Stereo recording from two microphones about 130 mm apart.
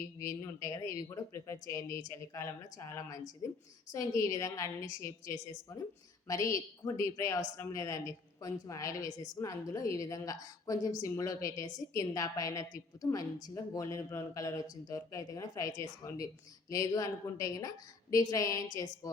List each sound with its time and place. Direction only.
0.0 s a woman's voice: 20° left (ahead or behind)